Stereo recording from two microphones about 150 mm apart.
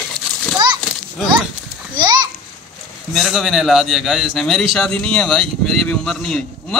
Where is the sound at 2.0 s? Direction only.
30° right (ahead or behind).